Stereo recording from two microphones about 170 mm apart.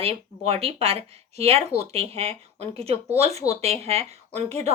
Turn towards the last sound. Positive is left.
turn(degrees=-35)  # may be behind; listen again after turning